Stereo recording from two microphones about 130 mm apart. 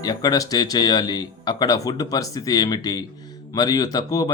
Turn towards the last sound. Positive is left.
turn(degrees=30)  # may be behind; listen again after turning